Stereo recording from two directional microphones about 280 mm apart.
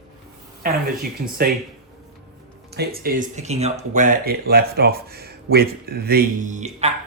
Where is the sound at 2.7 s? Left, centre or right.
Right.